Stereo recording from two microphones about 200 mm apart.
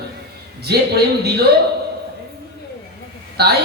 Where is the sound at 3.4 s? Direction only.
55° right (ahead or behind).